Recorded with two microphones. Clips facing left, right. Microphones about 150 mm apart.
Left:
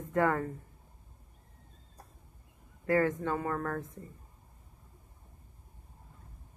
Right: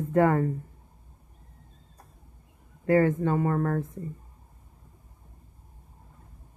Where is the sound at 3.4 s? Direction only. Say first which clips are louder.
Right 7 dB; 30° right (ahead or behind).